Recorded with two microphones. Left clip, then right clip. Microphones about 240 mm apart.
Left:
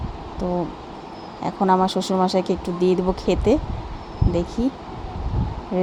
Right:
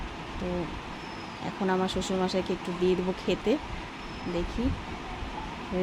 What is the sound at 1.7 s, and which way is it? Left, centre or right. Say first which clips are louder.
Speech: left 9 dB; left.